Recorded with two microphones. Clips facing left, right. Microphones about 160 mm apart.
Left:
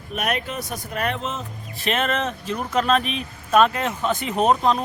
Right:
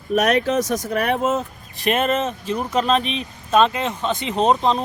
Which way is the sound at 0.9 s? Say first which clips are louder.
Right 5 dB; 65° right (ahead or behind).